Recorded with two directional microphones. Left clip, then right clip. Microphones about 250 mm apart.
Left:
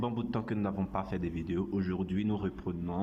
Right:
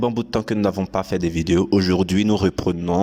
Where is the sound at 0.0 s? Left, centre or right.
Right.